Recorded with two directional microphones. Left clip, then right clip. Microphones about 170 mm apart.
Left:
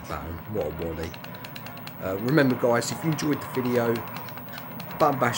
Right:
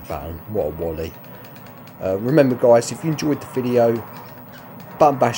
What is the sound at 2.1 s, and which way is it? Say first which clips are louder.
Speech: right 7 dB; 20° right (ahead or behind).